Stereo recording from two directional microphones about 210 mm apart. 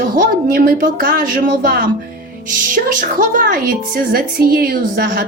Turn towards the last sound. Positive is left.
turn(degrees=-45)  # may be behind; listen again after turning